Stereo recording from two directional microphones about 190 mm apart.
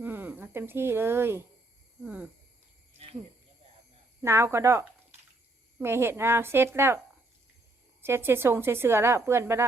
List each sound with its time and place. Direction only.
0.0 s speech: 10° right (ahead or behind)
4.2 s a woman's voice: 15° right (ahead or behind)
8.0 s a woman's voice: 10° right (ahead or behind)